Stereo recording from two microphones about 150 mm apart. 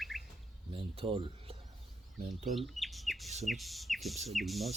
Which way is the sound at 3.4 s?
Centre (ahead or behind).